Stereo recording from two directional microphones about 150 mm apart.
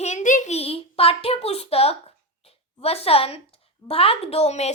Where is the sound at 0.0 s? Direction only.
50° left (ahead or behind).